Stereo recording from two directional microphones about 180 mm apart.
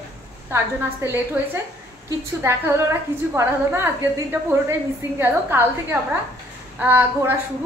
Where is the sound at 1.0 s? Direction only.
15° right (ahead or behind).